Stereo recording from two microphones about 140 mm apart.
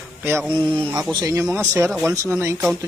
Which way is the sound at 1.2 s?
20° right (ahead or behind).